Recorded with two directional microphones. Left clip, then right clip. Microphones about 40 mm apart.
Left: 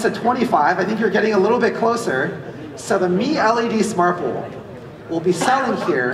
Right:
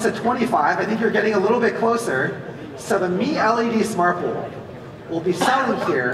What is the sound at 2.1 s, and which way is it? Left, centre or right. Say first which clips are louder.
Speech: left 1 dB; centre.